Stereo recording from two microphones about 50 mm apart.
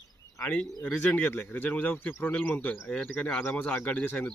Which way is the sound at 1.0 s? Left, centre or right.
Left.